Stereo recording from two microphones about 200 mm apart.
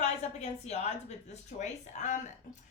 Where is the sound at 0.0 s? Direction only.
35° left (ahead or behind).